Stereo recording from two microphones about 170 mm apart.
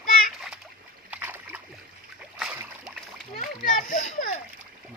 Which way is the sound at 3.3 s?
50° left (ahead or behind).